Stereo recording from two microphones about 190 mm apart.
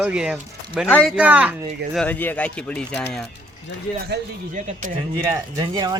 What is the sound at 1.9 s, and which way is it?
Speech, 10° left (ahead or behind).